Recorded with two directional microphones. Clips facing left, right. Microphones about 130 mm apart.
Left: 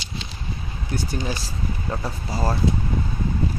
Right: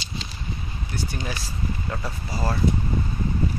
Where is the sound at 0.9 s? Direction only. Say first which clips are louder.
Left 4 dB; 35° left (ahead or behind).